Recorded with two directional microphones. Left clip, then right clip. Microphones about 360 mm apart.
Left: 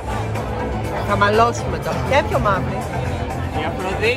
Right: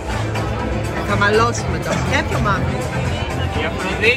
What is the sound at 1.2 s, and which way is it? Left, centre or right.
Speech, centre.